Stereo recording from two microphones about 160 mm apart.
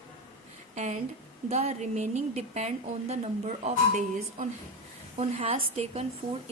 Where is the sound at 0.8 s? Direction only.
45° right (ahead or behind).